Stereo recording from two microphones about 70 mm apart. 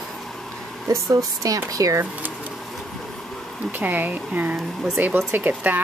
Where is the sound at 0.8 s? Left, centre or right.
Right.